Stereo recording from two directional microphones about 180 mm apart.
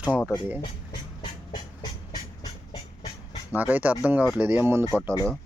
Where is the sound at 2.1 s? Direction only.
20° left (ahead or behind).